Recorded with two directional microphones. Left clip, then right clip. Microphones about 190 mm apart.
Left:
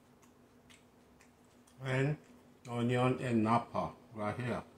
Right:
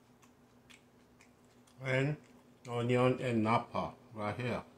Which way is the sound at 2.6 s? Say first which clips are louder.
Right 2 dB; 30° right (ahead or behind).